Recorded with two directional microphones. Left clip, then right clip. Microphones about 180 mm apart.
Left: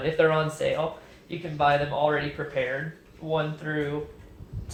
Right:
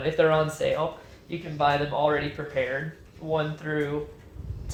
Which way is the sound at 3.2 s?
35° right (ahead or behind).